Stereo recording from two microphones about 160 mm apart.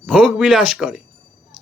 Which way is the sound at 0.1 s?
5° right (ahead or behind).